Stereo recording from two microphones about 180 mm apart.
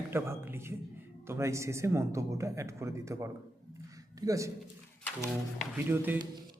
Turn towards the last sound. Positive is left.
turn(degrees=-10)  # may be behind; listen again after turning